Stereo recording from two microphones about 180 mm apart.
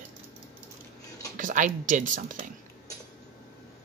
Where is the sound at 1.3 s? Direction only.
45° right (ahead or behind).